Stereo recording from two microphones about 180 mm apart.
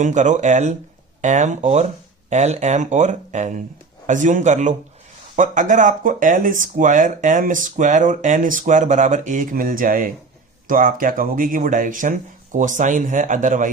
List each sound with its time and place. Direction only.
0.0 s speech: 45° right (ahead or behind)